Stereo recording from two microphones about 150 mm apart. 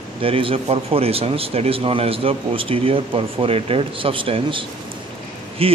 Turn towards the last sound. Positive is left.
turn(degrees=-40)  # may be behind; listen again after turning